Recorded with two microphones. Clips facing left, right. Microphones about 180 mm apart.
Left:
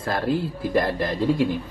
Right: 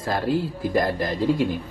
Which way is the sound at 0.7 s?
35° right (ahead or behind).